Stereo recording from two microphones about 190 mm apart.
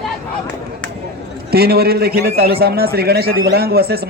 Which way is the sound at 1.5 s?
55° right (ahead or behind).